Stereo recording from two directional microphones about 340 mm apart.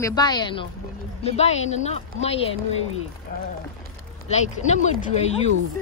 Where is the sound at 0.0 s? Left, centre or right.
Centre.